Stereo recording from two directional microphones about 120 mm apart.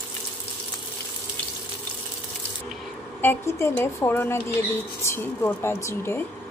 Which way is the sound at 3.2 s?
20° left (ahead or behind).